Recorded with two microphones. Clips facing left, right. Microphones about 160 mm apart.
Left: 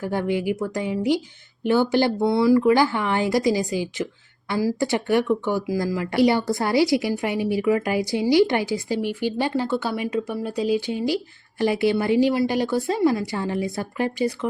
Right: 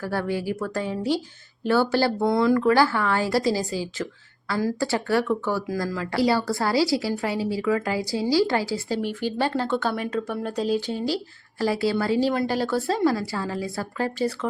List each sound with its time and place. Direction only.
0.0 s speech: 20° left (ahead or behind)
2.2 s speech: 5° left (ahead or behind)